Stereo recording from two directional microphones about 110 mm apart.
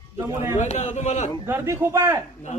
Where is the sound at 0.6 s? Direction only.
90° left.